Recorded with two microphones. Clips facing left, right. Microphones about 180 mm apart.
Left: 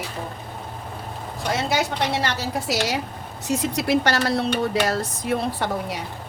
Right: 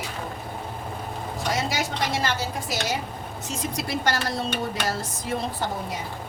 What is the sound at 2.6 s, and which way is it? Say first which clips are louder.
Speech: left 5 dB; 75° left (ahead or behind).